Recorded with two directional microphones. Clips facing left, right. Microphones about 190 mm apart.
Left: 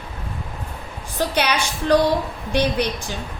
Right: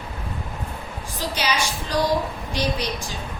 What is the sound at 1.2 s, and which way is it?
A woman's voice, 60° left (ahead or behind).